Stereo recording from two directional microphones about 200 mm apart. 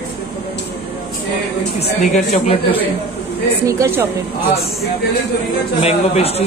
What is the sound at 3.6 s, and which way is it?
Speech, 15° right (ahead or behind).